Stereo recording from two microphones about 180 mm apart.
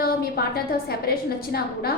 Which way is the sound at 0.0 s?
55° left (ahead or behind).